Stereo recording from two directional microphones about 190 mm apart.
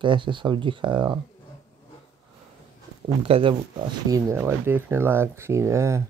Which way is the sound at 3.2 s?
30° right (ahead or behind).